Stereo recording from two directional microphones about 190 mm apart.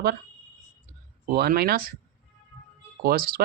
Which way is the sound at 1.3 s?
55° right (ahead or behind).